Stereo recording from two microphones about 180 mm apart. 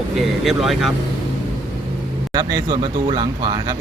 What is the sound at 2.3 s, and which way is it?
Speech, 25° right (ahead or behind).